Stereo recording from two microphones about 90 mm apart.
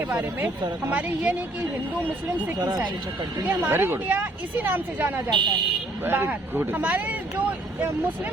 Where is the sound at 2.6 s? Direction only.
45° right (ahead or behind).